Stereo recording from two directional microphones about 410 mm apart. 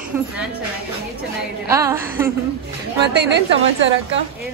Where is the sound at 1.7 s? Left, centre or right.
Centre.